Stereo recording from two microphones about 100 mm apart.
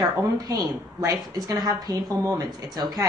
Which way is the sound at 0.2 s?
40° right (ahead or behind).